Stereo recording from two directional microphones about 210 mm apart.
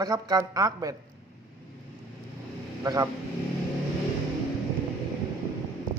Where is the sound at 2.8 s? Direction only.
20° right (ahead or behind).